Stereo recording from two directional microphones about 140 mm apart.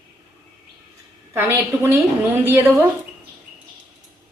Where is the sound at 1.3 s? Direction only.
15° right (ahead or behind).